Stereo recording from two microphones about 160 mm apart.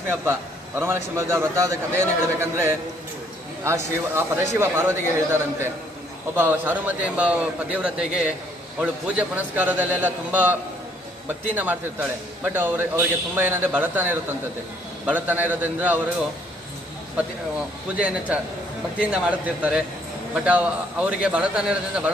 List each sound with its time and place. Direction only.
0.2 s a man's voice: 15° right (ahead or behind)
17.9 s a man's voice: 5° right (ahead or behind)